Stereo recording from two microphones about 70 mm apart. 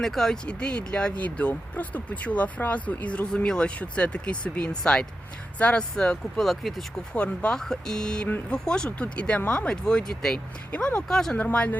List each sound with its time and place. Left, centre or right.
0.0 s speech: centre
0.4 s speech: centre
6.0 s speech: centre
7.1 s speech: centre
11.3 s speech: centre